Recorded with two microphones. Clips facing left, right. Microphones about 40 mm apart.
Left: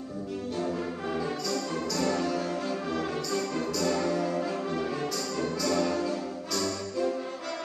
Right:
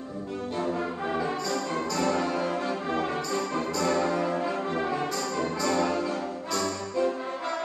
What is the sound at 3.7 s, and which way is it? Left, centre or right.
Brass instrument, right.